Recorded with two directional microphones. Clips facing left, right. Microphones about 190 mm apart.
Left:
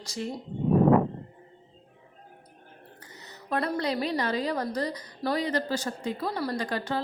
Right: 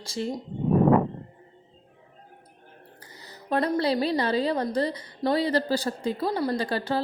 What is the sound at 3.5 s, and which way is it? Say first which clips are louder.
A woman's voice: right 4 dB; 30° right (ahead or behind).